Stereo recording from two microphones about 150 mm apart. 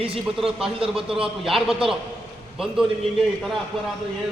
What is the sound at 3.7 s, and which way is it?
Speech, centre (ahead or behind).